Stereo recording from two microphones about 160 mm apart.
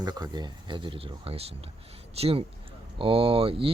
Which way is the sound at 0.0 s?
25° right (ahead or behind).